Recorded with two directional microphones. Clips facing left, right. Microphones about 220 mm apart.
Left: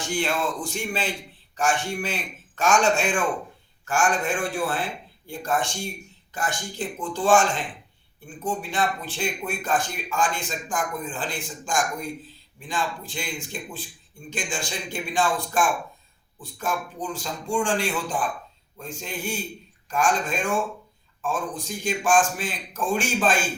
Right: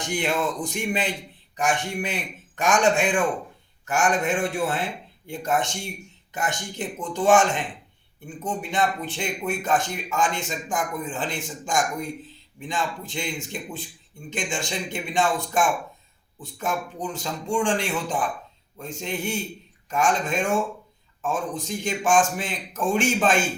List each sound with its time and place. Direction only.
0.0 s a man's voice: 20° right (ahead or behind)